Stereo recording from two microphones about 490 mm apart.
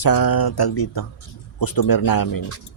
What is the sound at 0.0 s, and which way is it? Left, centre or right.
A man's voice, left.